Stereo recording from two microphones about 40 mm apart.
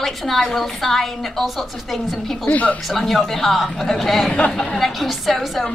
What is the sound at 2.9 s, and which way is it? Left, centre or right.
A woman's voice, centre.